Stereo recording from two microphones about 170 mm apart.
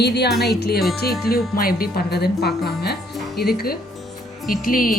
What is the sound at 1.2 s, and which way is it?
Speech, 60° left (ahead or behind).